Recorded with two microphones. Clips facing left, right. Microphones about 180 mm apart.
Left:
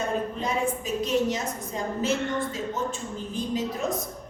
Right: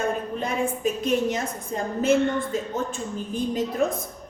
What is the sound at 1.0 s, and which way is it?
A woman's voice, 55° right (ahead or behind).